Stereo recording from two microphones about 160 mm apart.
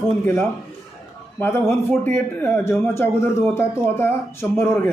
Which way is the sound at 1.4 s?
15° left (ahead or behind).